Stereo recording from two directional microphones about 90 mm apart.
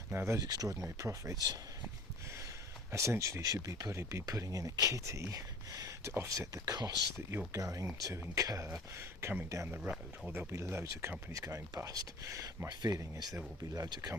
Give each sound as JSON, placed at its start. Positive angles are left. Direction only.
{"t": 0.1, "sound": "speech", "side_deg": -25}
{"t": 0.3, "sound": "speech", "side_deg": -45}
{"t": 2.9, "sound": "speech", "side_deg": -35}
{"t": 5.7, "sound": "a sound", "side_deg": -45}
{"t": 6.1, "sound": "speech", "side_deg": -35}
{"t": 9.0, "sound": "speech", "side_deg": -25}
{"t": 9.5, "sound": "speech", "side_deg": -35}
{"t": 12.6, "sound": "speech", "side_deg": -50}